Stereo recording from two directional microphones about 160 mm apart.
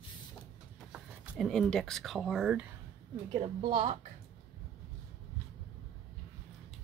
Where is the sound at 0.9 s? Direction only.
5° right (ahead or behind).